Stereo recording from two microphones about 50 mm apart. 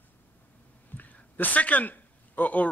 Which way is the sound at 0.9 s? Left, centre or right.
Left.